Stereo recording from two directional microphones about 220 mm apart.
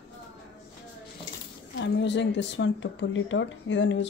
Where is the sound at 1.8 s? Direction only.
55° left (ahead or behind).